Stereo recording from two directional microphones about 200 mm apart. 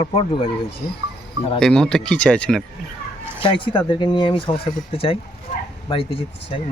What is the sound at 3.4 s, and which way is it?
Speech, 25° left (ahead or behind).